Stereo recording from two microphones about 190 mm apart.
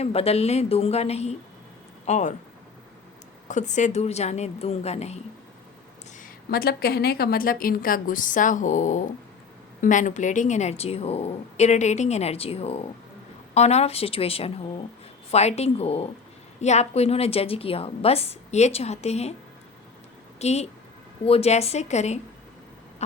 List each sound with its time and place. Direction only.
0.0 s a woman's voice: 30° left (ahead or behind)
3.5 s a woman's voice: 40° left (ahead or behind)
6.5 s a woman's voice: 55° left (ahead or behind); by 19.3 s 35° left (ahead or behind)
20.4 s a woman's voice: 35° left (ahead or behind)